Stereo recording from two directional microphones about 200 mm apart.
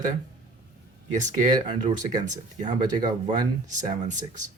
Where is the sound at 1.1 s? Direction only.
40° right (ahead or behind).